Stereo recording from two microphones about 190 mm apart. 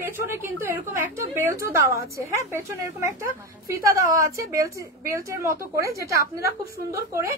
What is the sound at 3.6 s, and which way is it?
A woman's voice, 15° right (ahead or behind).